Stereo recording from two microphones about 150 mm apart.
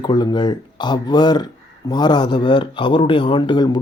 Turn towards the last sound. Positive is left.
turn(degrees=30)  # may be behind; listen again after turning